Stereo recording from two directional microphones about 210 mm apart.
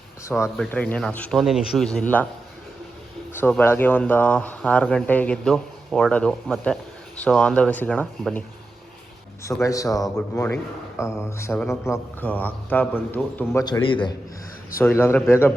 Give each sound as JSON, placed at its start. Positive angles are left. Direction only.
{"t": 0.3, "sound": "speech", "side_deg": 10}
{"t": 3.3, "sound": "speech", "side_deg": 10}
{"t": 9.6, "sound": "speech", "side_deg": 15}
{"t": 14.8, "sound": "speech", "side_deg": 10}